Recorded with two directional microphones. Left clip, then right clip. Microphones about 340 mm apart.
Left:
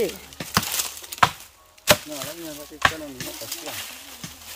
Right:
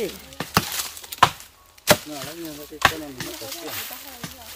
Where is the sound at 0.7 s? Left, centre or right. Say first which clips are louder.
Left 1 dB; left.